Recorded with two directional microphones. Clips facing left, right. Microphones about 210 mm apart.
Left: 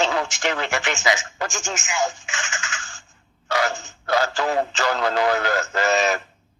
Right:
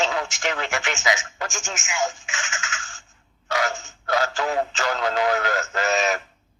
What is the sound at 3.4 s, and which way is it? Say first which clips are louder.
Speech: left 2 dB; 35° left (ahead or behind).